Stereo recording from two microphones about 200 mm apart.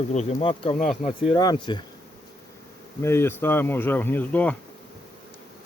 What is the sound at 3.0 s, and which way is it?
Speech, 15° left (ahead or behind).